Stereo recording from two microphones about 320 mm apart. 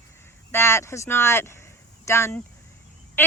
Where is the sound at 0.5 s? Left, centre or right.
Centre.